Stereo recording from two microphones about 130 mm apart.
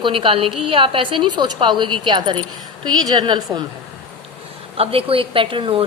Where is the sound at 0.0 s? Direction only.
40° right (ahead or behind).